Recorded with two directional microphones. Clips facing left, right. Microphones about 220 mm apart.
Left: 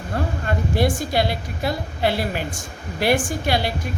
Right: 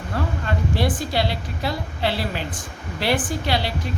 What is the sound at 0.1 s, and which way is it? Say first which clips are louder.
A woman's voice: left 1 dB; 45° left (ahead or behind).